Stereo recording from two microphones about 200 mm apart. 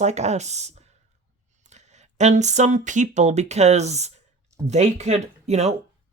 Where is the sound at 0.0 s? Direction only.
35° right (ahead or behind).